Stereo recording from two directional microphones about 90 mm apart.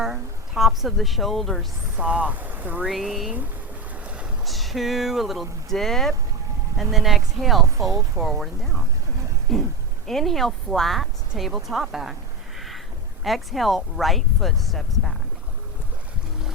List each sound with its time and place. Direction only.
0.0 s a woman's voice: 5° right (ahead or behind)
2.0 s speech: 15° right (ahead or behind)
2.8 s speech: centre (ahead or behind)
4.0 s boat: 15° right (ahead or behind)
4.4 s speech: centre (ahead or behind)
7.8 s speech: 35° right (ahead or behind)
8.1 s speech: 5° right (ahead or behind)
12.5 s a sound: centre (ahead or behind)
13.2 s speech: centre (ahead or behind)